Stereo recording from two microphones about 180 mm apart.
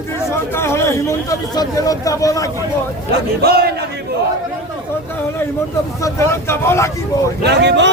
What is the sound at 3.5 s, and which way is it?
Speech, 60° right (ahead or behind).